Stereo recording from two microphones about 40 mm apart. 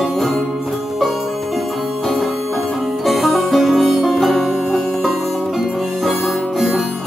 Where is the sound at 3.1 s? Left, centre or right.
Centre.